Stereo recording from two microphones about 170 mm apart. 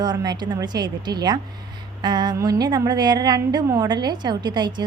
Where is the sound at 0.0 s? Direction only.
25° right (ahead or behind).